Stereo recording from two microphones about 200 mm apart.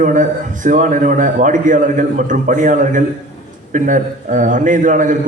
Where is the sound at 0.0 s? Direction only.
40° right (ahead or behind).